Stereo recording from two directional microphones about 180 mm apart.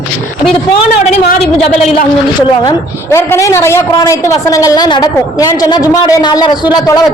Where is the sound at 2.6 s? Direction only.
15° left (ahead or behind).